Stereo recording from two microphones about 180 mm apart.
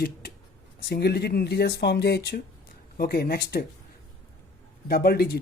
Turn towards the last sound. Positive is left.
turn(degrees=60)  # may be behind; listen again after turning